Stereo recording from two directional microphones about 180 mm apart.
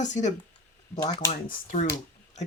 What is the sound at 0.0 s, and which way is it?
Speech, 40° left (ahead or behind).